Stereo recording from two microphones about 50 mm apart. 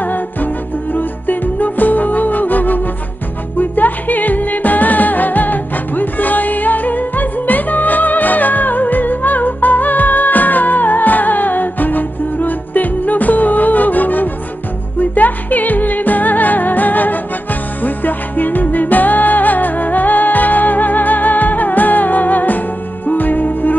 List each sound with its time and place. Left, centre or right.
0.0 s music: left